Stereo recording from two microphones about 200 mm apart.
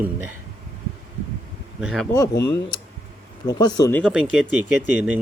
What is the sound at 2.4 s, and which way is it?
Speech, 20° left (ahead or behind).